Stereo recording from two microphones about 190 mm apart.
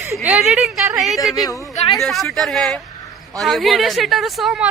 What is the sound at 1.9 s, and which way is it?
Speech, centre (ahead or behind).